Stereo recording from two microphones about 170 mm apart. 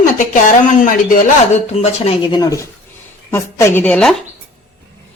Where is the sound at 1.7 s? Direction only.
35° left (ahead or behind); by 4.1 s 5° left (ahead or behind).